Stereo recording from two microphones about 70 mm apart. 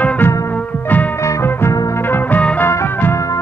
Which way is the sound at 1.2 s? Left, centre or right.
Left.